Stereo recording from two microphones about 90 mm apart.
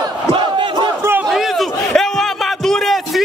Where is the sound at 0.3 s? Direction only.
60° right (ahead or behind).